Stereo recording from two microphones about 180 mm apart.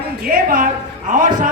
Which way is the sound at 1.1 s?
45° right (ahead or behind).